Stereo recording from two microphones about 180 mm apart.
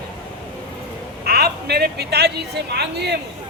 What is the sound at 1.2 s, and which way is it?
A woman's voice, 60° right (ahead or behind).